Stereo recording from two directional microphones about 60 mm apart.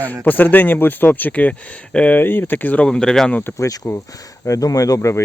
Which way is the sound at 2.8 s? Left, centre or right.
Centre.